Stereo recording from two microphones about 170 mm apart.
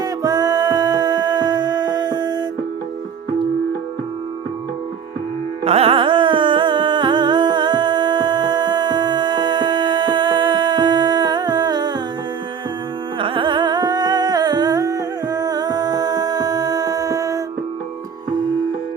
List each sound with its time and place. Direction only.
0.0 s music: 25° right (ahead or behind)
5.6 s music: 35° right (ahead or behind)
13.1 s music: 30° right (ahead or behind)